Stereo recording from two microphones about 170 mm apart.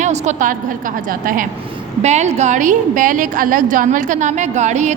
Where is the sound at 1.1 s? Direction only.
55° right (ahead or behind).